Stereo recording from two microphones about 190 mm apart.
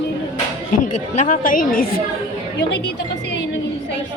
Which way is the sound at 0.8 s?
40° left (ahead or behind).